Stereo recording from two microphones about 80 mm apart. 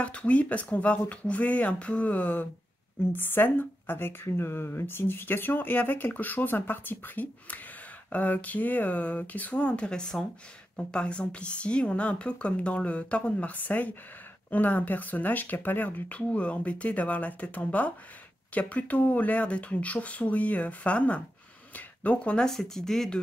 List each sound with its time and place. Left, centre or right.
0.0 s a woman's voice: centre